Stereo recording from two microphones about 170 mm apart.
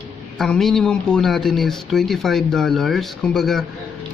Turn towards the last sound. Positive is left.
turn(degrees=0)  # may be behind; listen again after turning